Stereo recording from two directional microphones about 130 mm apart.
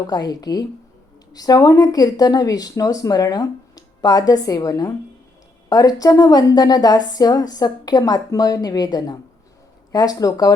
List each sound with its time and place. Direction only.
0.1 s a woman's voice: 30° left (ahead or behind)